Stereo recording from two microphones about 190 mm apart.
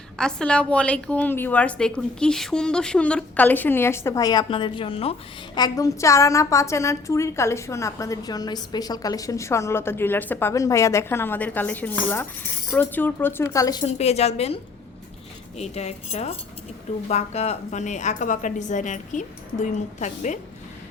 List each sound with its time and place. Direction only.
0.2 s a woman's voice: 5° left (ahead or behind); by 5.1 s 30° left (ahead or behind)
5.5 s a woman's voice: 20° left (ahead or behind)
13.8 s a woman's voice: 35° left (ahead or behind)